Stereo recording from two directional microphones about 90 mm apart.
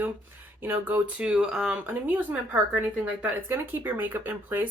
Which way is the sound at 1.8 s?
20° right (ahead or behind).